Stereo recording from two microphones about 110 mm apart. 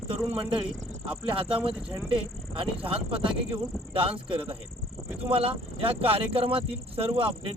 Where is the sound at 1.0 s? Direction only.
55° right (ahead or behind).